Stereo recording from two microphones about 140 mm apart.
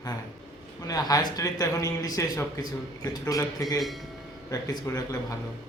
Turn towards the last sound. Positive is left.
turn(degrees=25)  # may be behind; listen again after turning